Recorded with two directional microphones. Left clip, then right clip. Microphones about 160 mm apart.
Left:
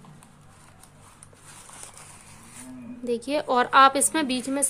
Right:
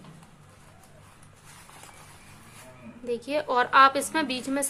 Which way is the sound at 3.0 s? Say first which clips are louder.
Left 2 dB; 30° left (ahead or behind).